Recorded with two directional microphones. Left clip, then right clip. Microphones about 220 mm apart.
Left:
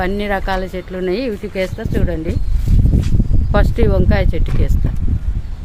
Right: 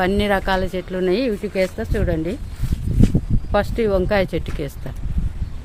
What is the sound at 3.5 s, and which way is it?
Speech, 5° right (ahead or behind).